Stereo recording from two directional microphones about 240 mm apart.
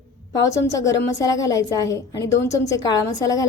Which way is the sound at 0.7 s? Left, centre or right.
Centre.